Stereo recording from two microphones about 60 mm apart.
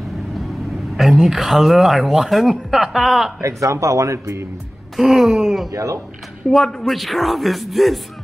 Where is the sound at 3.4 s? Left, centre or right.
Right.